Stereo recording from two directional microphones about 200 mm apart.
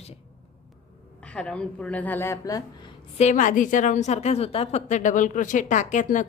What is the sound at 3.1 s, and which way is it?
A woman's voice, 35° left (ahead or behind).